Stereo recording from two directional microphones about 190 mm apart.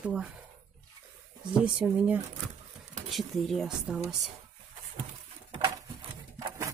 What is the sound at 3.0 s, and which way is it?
Speech, centre (ahead or behind).